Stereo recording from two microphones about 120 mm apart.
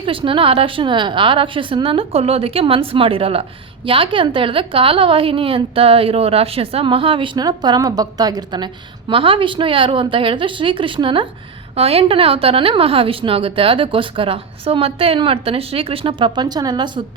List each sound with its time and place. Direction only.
0.0 s a woman's voice: 45° right (ahead or behind)